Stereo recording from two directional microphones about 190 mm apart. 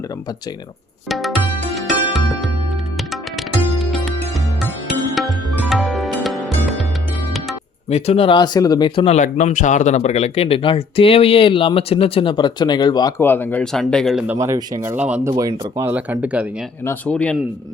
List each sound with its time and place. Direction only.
1.0 s music: centre (ahead or behind)
5.1 s music: centre (ahead or behind)
7.9 s speech: 35° left (ahead or behind)
9.1 s speech: 40° left (ahead or behind); by 14.3 s centre (ahead or behind)
14.3 s speech: 15° right (ahead or behind)
15.3 s speech: 20° right (ahead or behind)
16.8 s speech: 10° left (ahead or behind)